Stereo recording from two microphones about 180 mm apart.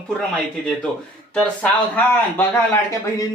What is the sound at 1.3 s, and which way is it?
A man's voice, 10° left (ahead or behind).